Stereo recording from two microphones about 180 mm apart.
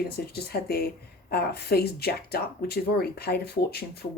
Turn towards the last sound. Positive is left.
turn(degrees=65)  # may be behind; listen again after turning